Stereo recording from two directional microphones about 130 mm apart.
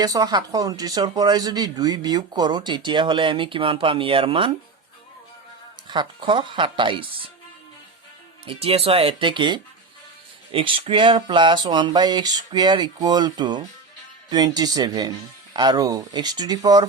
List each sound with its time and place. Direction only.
0.0 s speech: 30° right (ahead or behind)
5.9 s speech: 35° right (ahead or behind)
8.4 s speech: 50° right (ahead or behind); by 16.8 s 30° right (ahead or behind)